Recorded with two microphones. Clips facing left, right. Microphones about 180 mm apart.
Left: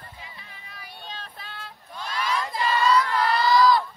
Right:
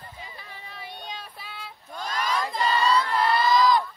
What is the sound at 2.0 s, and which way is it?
Crowd, 45° right (ahead or behind).